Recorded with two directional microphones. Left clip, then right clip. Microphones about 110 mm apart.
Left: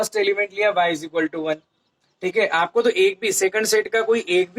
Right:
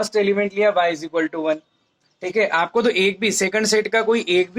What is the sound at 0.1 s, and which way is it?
Speech, 40° right (ahead or behind).